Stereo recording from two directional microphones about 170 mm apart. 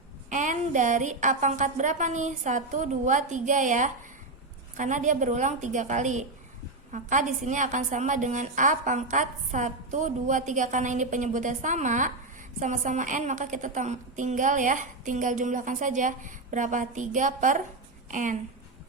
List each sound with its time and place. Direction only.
0.3 s a woman's voice: 45° right (ahead or behind)